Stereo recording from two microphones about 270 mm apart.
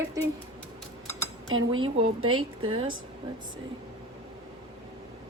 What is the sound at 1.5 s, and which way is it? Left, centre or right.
Speech, right.